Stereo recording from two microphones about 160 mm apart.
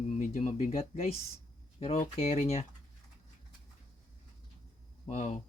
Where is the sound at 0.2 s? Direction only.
50° left (ahead or behind).